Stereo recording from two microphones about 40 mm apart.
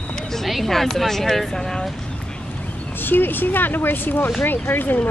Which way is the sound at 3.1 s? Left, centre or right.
Left.